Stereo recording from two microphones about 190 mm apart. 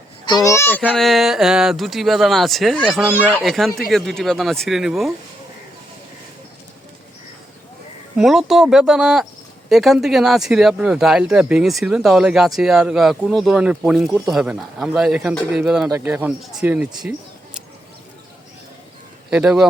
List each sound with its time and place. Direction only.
0.3 s a child's voice: 20° left (ahead or behind)
0.8 s speech: 5° right (ahead or behind)
8.1 s speech: centre (ahead or behind)
17.0 s a sound: 5° right (ahead or behind)
19.3 s speech: 5° right (ahead or behind)